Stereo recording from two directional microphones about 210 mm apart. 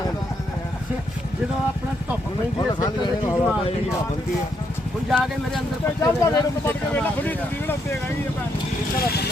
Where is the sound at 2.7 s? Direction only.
20° left (ahead or behind).